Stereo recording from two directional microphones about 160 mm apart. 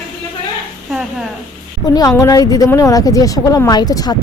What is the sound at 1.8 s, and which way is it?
Speech, 25° left (ahead or behind).